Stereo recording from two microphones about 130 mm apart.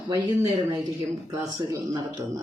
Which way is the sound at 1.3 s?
25° right (ahead or behind).